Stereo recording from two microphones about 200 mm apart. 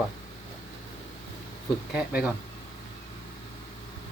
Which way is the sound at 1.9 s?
5° right (ahead or behind).